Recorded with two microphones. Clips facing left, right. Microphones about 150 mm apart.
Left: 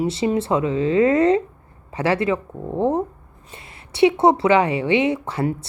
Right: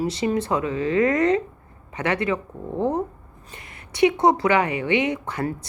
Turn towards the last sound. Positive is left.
turn(degrees=30)  # may be behind; listen again after turning